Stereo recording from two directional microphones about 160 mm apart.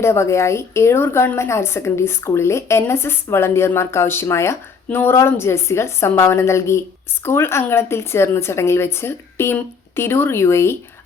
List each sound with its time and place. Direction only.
0.0 s a woman's voice: 15° left (ahead or behind)